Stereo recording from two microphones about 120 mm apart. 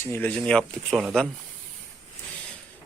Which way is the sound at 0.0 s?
20° left (ahead or behind).